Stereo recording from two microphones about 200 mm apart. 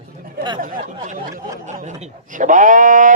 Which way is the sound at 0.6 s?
45° right (ahead or behind).